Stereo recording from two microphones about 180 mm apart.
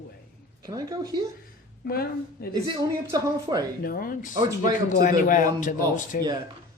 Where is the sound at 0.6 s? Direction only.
20° right (ahead or behind).